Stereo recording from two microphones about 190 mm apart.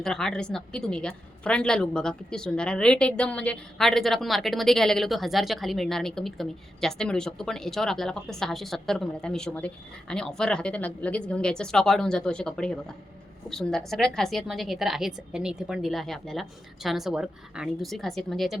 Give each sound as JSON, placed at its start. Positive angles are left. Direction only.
{"t": 0.0, "sound": "a woman's voice", "side_deg": 5}